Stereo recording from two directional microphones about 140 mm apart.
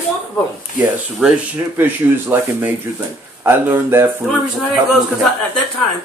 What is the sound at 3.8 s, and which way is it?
Speech, 15° right (ahead or behind).